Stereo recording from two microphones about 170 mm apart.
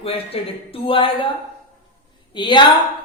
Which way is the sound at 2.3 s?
25° left (ahead or behind).